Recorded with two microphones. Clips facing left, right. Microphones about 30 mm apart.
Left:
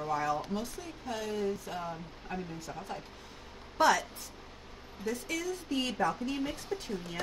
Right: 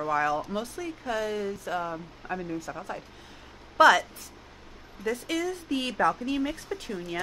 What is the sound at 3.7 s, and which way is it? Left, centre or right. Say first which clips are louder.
Speech: right 8 dB; right.